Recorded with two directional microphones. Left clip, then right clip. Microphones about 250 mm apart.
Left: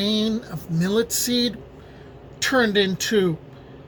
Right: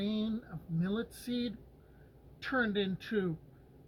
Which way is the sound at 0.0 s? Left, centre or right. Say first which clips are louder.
Left 14 dB; centre.